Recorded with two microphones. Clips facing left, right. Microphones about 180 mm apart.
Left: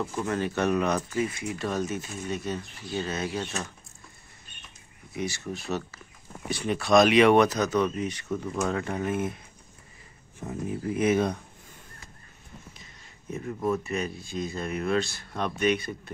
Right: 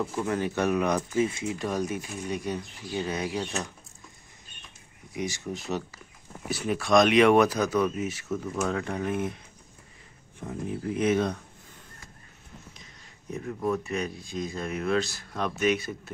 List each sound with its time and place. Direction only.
0.0 s speech: 10° right (ahead or behind)
5.1 s speech: 15° right (ahead or behind); by 9.4 s centre (ahead or behind)
10.4 s speech: 5° left (ahead or behind)
13.3 s speech: 5° left (ahead or behind)